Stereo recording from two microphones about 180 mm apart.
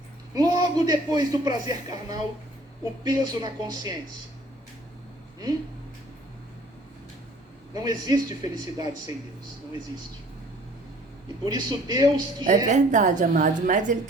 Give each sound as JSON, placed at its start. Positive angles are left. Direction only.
{"t": 0.3, "sound": "a man's voice", "side_deg": -20}
{"t": 7.7, "sound": "a man's voice", "side_deg": -20}
{"t": 11.4, "sound": "a man's voice", "side_deg": -20}
{"t": 12.5, "sound": "a woman's voice", "side_deg": -45}